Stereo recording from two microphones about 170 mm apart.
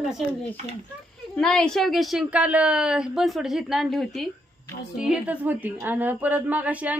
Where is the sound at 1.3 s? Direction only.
5° left (ahead or behind).